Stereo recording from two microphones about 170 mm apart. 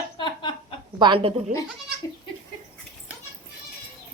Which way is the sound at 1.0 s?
30° right (ahead or behind).